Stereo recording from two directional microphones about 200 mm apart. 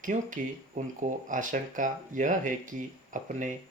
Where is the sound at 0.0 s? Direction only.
40° right (ahead or behind).